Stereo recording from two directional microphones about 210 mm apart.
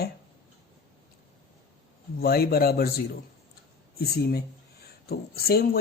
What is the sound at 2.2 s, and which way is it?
A man's voice, 45° left (ahead or behind).